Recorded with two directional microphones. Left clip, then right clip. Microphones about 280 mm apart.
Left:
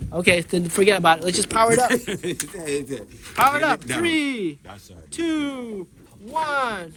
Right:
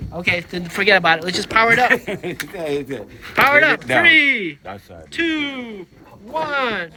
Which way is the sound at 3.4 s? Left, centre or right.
Centre.